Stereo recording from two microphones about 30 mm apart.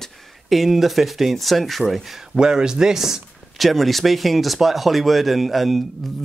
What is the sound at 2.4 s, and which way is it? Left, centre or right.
Speech, right.